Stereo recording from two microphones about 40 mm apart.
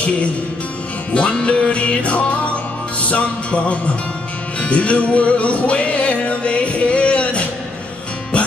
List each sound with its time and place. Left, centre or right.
1.1 s music: left